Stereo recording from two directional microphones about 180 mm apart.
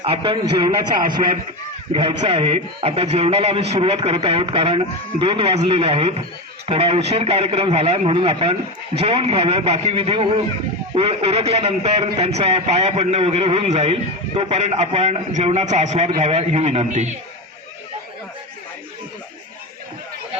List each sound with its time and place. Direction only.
0.0 s a man's voice: 30° right (ahead or behind)